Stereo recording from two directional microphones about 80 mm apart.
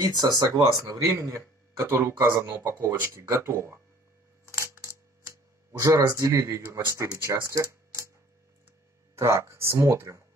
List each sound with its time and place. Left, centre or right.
0.5 s speech: right
4.5 s coin: right
5.8 s speech: right
9.1 s speech: right